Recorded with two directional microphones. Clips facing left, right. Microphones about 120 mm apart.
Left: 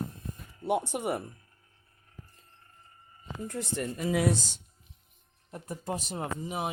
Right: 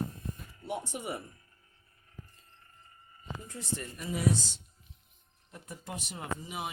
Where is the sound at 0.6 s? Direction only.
70° left (ahead or behind).